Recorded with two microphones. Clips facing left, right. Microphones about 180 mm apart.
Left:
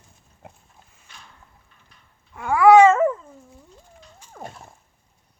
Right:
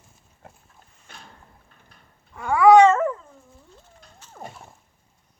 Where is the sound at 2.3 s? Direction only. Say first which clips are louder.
Left 1 dB; 5° left (ahead or behind).